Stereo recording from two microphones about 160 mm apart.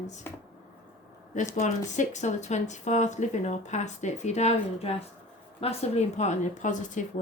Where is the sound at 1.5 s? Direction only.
50° left (ahead or behind).